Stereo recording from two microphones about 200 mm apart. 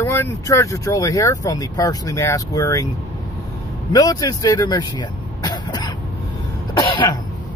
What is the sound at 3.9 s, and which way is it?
Speech, 20° left (ahead or behind).